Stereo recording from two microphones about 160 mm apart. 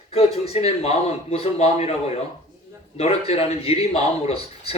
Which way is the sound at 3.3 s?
40° left (ahead or behind).